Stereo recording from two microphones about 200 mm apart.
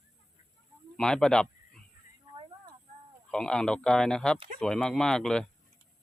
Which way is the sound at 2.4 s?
25° right (ahead or behind).